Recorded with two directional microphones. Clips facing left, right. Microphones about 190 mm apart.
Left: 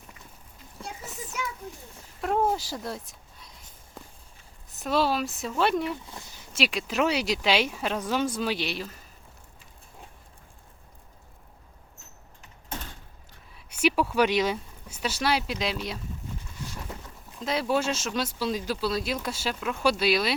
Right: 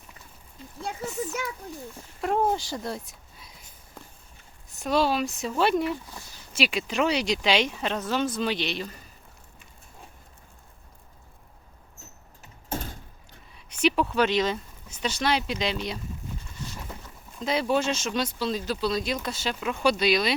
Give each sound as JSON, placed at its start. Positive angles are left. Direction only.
{"t": 2.2, "sound": "speech", "side_deg": 0}
{"t": 4.8, "sound": "speech", "side_deg": 0}
{"t": 12.4, "sound": "keys jangling", "side_deg": -40}
{"t": 13.7, "sound": "speech", "side_deg": 10}
{"t": 17.4, "sound": "speech", "side_deg": 0}